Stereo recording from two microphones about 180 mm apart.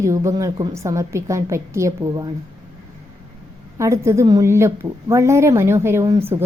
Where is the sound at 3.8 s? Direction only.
15° right (ahead or behind).